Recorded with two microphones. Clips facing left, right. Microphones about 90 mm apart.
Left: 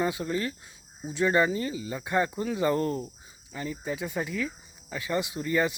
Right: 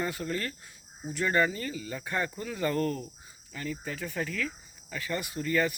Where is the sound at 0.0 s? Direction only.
15° left (ahead or behind).